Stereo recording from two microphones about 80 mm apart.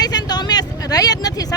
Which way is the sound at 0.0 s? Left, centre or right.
Left.